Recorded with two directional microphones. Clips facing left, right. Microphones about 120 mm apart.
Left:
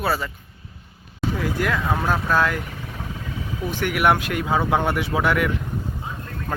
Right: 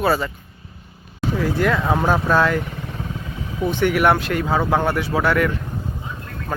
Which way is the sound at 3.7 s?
10° left (ahead or behind).